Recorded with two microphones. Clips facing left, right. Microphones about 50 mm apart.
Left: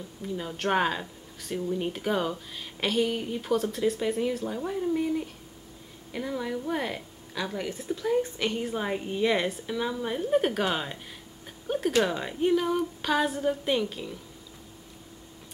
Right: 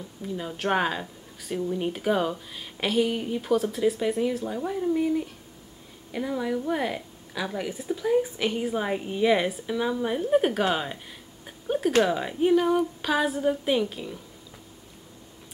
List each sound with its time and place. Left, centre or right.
0.2 s a woman's voice: centre
11.4 s a sound: centre
12.0 s a woman's voice: centre